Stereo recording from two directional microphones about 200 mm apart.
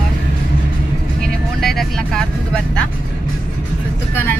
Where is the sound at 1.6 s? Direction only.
Centre (ahead or behind).